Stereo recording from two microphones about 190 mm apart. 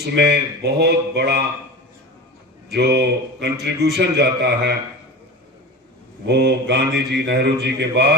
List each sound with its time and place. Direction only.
0.0 s mantra: 60° right (ahead or behind)
2.7 s mantra: 60° right (ahead or behind)
6.2 s mantra: 60° right (ahead or behind)